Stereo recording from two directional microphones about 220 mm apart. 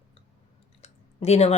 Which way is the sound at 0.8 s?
30° left (ahead or behind).